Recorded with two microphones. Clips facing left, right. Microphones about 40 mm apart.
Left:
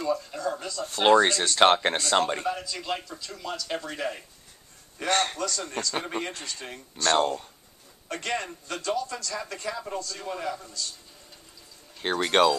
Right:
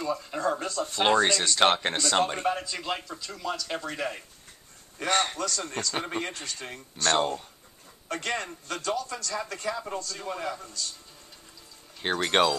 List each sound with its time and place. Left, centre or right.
0.0 s speech: centre
0.3 s speech: right
0.8 s a man's voice: centre
2.4 s a man's voice: right
2.7 s a man's voice: centre
12.0 s a man's voice: centre